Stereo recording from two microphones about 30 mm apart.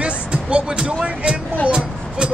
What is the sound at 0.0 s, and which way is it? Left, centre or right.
Music, right.